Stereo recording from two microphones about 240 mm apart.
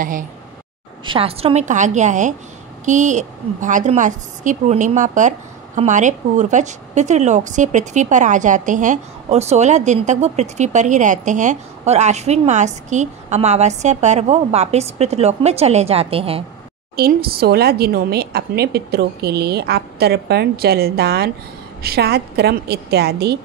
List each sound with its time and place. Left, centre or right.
1.0 s a woman's voice: right
16.9 s a woman's voice: right